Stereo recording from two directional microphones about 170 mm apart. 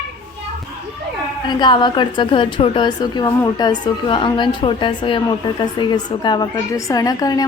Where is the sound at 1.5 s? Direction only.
25° left (ahead or behind).